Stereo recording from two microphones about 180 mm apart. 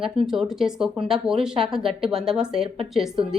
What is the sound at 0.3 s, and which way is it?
A woman's voice, centre (ahead or behind).